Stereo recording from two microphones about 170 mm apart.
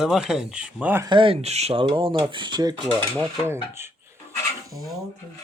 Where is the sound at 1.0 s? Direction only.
30° right (ahead or behind).